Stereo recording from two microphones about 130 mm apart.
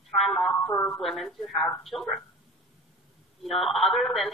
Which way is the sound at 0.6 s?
20° left (ahead or behind).